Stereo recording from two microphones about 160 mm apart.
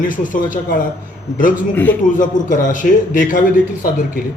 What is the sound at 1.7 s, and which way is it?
Speech, 10° left (ahead or behind).